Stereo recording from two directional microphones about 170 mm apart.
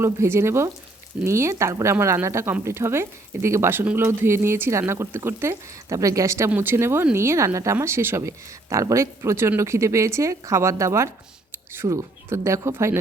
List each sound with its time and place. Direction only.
0.0 s speech: 15° right (ahead or behind)